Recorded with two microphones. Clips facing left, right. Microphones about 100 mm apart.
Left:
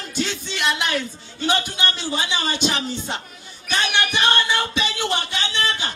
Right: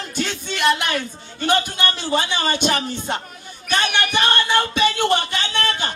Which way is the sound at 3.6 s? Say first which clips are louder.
Right 2 dB; 50° right (ahead or behind).